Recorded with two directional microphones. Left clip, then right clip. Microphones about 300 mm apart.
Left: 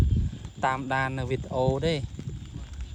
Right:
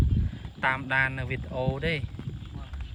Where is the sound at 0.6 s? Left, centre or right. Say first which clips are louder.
Right 1 dB; centre.